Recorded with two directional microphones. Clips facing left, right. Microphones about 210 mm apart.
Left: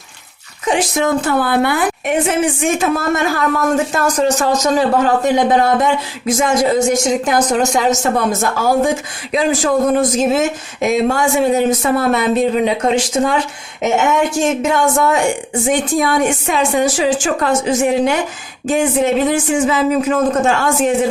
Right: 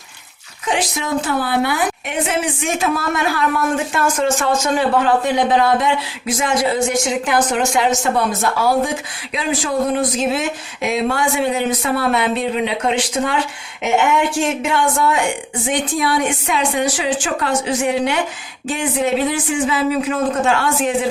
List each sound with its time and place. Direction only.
0.9 s speech: 50° left (ahead or behind)